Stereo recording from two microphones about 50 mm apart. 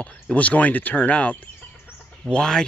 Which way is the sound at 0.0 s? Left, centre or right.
Left.